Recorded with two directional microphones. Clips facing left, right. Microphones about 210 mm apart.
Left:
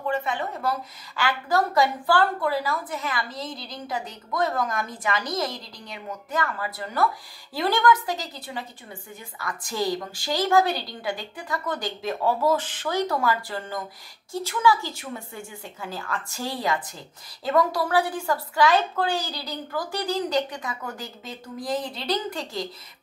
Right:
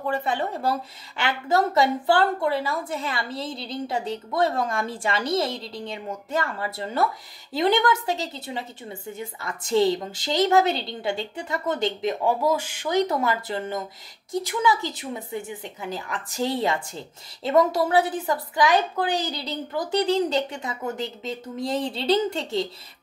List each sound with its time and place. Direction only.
0.1 s a woman's voice: 35° right (ahead or behind)